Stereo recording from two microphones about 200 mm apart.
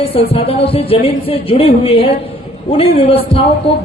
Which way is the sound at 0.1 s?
30° left (ahead or behind).